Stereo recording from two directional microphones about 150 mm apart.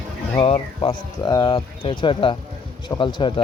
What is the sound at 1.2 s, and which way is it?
Speech, 30° left (ahead or behind).